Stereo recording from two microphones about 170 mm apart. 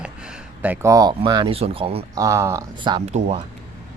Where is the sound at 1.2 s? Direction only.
25° right (ahead or behind).